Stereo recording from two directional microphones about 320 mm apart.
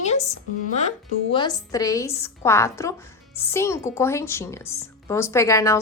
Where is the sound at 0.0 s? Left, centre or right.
Left.